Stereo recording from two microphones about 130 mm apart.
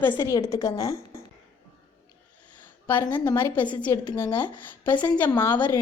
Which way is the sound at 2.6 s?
15° left (ahead or behind).